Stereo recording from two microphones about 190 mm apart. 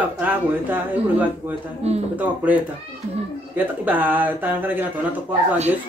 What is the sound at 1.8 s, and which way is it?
Speech, 35° right (ahead or behind).